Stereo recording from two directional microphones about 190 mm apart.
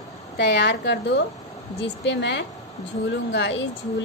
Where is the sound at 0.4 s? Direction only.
65° left (ahead or behind).